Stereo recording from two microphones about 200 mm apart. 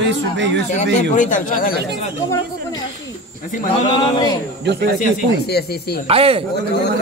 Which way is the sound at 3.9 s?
20° left (ahead or behind).